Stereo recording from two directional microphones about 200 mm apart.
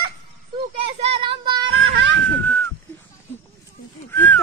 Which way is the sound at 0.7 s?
30° right (ahead or behind).